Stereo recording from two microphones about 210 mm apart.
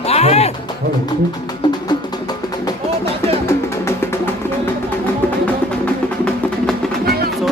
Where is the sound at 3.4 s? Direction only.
15° left (ahead or behind).